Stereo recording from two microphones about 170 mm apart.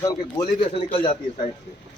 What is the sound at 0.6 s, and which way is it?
Speech, 35° left (ahead or behind).